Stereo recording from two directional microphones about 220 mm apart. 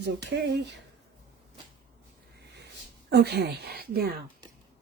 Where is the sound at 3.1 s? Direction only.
45° right (ahead or behind).